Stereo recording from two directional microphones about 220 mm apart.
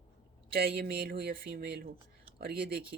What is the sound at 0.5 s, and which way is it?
Speech, 45° right (ahead or behind).